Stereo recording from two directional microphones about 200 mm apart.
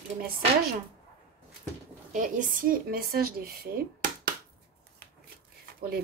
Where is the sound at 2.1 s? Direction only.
40° right (ahead or behind).